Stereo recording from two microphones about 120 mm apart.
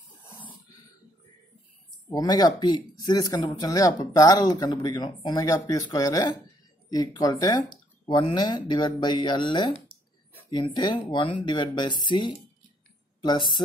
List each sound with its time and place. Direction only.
2.0 s speech: 35° left (ahead or behind)
13.2 s speech: 40° left (ahead or behind)